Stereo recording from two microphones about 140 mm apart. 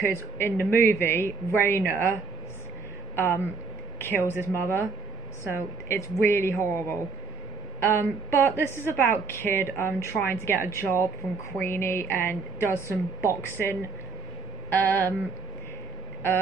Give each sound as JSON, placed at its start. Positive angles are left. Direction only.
{"t": 0.4, "sound": "a woman's voice", "side_deg": 15}
{"t": 3.2, "sound": "a woman's voice", "side_deg": 15}
{"t": 4.3, "sound": "a woman's voice", "side_deg": -15}
{"t": 4.6, "sound": "a woman's voice", "side_deg": 15}
{"t": 5.9, "sound": "a woman's voice", "side_deg": 20}